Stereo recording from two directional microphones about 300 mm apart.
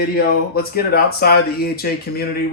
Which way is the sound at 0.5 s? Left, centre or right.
Left.